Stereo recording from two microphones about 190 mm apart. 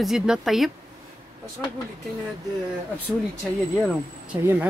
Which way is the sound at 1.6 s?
15° left (ahead or behind).